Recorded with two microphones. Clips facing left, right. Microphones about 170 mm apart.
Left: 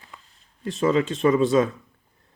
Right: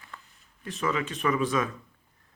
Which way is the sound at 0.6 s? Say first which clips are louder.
Left 8 dB; 30° left (ahead or behind).